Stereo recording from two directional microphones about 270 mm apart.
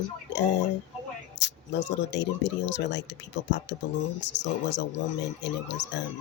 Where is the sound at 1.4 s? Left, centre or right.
Left.